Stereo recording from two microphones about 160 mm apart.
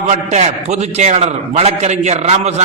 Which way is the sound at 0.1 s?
45° right (ahead or behind).